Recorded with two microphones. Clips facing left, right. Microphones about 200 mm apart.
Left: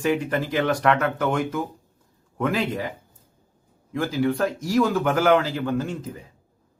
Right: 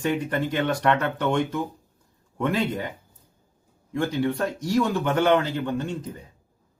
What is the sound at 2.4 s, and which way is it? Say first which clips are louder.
Speech: even; centre (ahead or behind).